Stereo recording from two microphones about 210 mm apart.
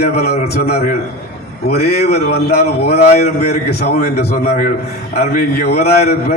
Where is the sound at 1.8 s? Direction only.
50° left (ahead or behind).